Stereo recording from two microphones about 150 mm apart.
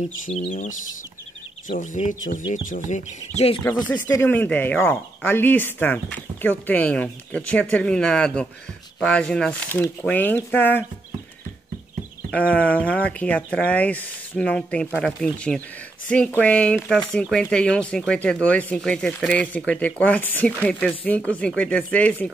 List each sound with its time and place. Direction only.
0.3 s speech: 40° left (ahead or behind)
1.8 s speech: 55° left (ahead or behind)
3.7 s speech: 15° left (ahead or behind)
12.3 s speech: 10° left (ahead or behind)